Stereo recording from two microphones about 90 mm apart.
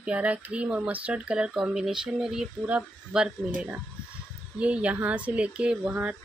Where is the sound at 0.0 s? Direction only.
15° right (ahead or behind).